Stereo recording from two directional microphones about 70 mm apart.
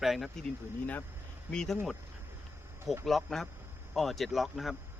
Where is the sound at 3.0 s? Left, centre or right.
Centre.